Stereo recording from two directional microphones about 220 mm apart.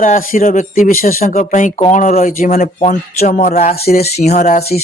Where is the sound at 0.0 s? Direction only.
40° left (ahead or behind).